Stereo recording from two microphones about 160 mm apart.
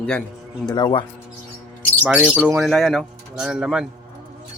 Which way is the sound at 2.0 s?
10° right (ahead or behind).